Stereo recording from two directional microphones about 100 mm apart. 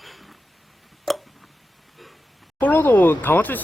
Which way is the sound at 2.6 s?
20° left (ahead or behind).